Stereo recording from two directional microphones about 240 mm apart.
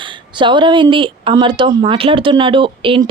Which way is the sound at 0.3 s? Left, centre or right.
Centre.